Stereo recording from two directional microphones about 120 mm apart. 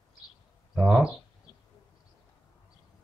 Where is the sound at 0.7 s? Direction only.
5° right (ahead or behind).